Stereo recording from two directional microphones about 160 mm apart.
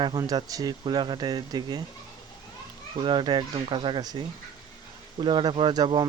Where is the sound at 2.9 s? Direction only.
30° right (ahead or behind).